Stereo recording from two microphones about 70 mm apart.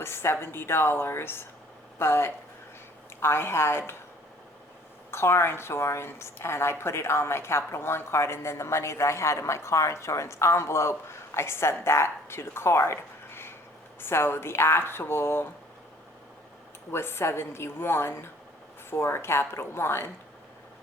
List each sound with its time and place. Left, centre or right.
0.0 s a woman's voice: left
5.1 s a woman's voice: left
16.9 s a woman's voice: left